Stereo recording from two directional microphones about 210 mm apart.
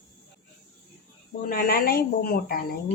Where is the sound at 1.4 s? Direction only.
45° left (ahead or behind).